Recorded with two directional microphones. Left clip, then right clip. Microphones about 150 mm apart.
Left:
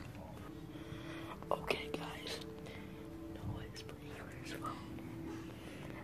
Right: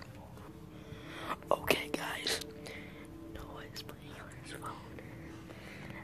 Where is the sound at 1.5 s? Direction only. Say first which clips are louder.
Right 6 dB; 35° right (ahead or behind).